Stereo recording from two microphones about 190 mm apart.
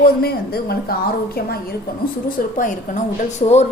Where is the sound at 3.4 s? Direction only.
30° left (ahead or behind).